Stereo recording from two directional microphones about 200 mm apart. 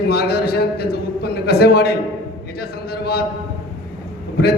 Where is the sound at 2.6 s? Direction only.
50° left (ahead or behind).